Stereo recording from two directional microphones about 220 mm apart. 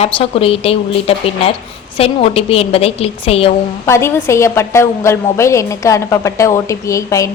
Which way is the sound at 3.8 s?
10° left (ahead or behind).